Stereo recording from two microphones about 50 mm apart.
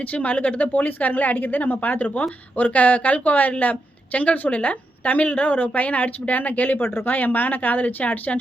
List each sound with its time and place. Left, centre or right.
0.0 s a woman's voice: left
6.7 s speech: left
7.1 s a woman's voice: left